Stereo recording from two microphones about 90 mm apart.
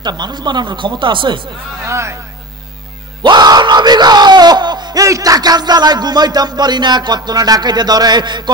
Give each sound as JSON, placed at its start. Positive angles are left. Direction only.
{"t": 0.0, "sound": "speech", "side_deg": -55}
{"t": 1.9, "sound": "speech", "side_deg": -30}
{"t": 3.2, "sound": "screaming", "side_deg": -55}
{"t": 5.0, "sound": "speech", "side_deg": -40}